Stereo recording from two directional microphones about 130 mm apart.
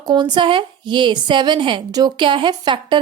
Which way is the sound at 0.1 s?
35° right (ahead or behind).